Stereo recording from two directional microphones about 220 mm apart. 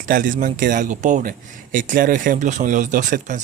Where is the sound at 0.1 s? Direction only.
40° right (ahead or behind).